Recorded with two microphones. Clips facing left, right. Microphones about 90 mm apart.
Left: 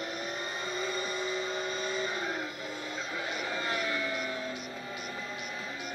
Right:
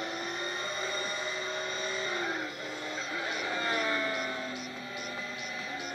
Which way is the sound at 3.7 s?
40° right (ahead or behind).